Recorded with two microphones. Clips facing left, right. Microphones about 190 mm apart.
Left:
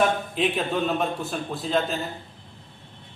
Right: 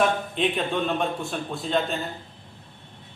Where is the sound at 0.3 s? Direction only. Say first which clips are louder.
Even; centre (ahead or behind).